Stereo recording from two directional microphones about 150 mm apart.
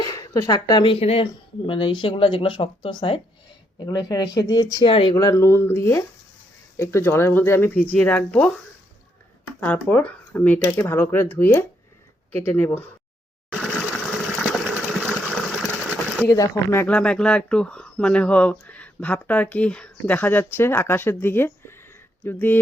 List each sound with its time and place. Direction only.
0.0 s speech: 25° left (ahead or behind)
3.8 s speech: 25° left (ahead or behind)
5.1 s speech: 20° left (ahead or behind)
9.8 s speech: 10° left (ahead or behind)
14.4 s a sound: centre (ahead or behind)
16.0 s sewing machine: 10° left (ahead or behind)
16.3 s speech: 25° left (ahead or behind)
16.8 s speech: 5° left (ahead or behind)